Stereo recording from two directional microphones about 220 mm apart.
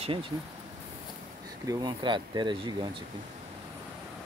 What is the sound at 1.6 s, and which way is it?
Speech, 20° right (ahead or behind).